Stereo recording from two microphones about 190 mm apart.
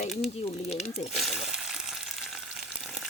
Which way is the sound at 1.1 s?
Centre (ahead or behind).